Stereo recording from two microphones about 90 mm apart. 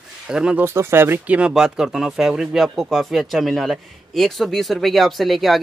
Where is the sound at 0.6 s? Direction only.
25° right (ahead or behind).